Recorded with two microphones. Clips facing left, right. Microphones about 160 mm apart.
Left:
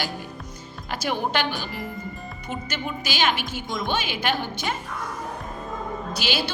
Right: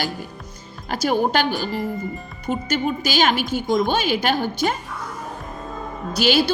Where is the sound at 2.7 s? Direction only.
40° right (ahead or behind).